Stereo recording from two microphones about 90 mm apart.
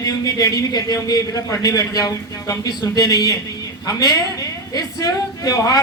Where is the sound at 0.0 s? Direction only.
45° left (ahead or behind).